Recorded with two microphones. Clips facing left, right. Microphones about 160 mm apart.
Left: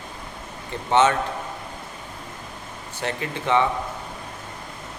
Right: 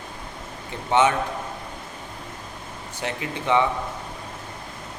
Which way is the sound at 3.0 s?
15° right (ahead or behind).